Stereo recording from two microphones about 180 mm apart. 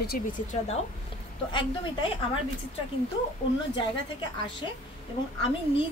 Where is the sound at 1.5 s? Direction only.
30° left (ahead or behind).